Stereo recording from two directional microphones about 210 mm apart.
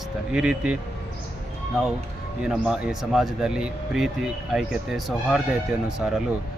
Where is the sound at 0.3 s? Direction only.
5° right (ahead or behind).